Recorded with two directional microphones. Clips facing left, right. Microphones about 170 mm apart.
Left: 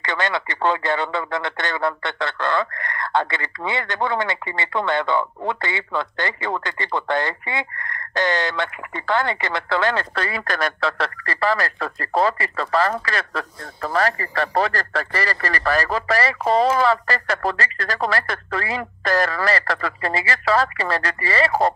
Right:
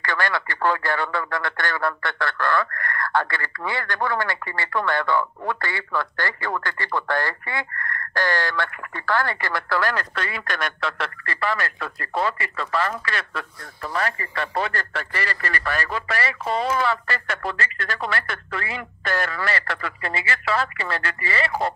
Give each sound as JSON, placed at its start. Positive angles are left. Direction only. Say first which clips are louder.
{"t": 0.0, "sound": "speech", "louder": "left 2 dB", "side_deg": 20}
{"t": 10.1, "sound": "speech", "louder": "left 4 dB", "side_deg": 35}